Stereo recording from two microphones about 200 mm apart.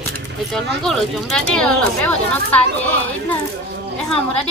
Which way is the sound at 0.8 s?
5° left (ahead or behind).